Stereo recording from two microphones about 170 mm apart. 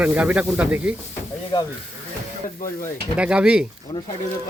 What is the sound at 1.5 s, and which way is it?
Speech, 25° left (ahead or behind).